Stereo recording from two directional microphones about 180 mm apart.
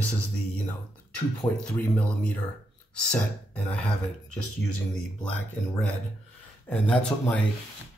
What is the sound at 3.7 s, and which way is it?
Speech, 5° left (ahead or behind).